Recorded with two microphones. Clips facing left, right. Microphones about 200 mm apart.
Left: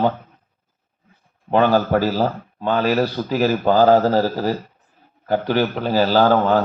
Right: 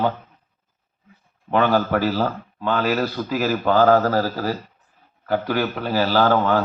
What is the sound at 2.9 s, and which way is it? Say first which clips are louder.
Speech: left 3 dB; 25° left (ahead or behind).